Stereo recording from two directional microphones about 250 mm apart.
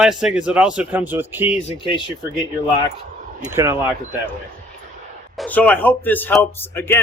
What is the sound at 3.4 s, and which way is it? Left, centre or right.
Speech, centre.